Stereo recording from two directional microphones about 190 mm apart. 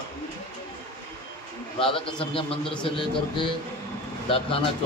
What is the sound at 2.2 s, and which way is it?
Speech, 30° left (ahead or behind).